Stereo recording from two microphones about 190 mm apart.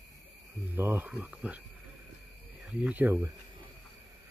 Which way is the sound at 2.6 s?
5° right (ahead or behind).